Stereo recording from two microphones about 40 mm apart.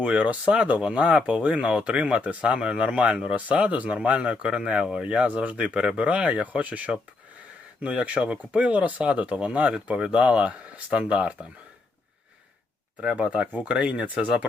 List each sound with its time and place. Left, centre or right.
0.0 s speech: right
3.7 s speech: right
13.7 s speech: right